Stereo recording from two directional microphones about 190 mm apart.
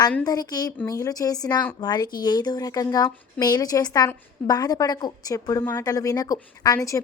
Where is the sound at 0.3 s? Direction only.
20° left (ahead or behind).